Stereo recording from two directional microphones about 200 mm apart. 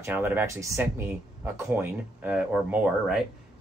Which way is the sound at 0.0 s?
10° right (ahead or behind).